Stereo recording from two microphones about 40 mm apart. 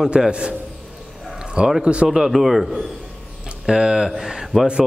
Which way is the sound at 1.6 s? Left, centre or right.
Right.